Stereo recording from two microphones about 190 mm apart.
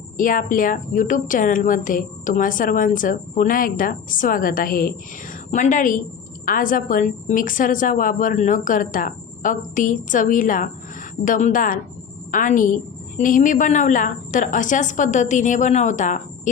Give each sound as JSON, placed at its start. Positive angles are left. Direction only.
{"t": 0.2, "sound": "a woman's voice", "side_deg": 45}